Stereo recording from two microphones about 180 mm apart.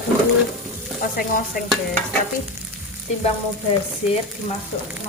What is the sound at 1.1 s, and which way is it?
Speech, 50° left (ahead or behind).